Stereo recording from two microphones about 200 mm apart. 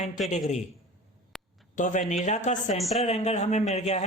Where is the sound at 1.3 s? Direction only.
Centre (ahead or behind).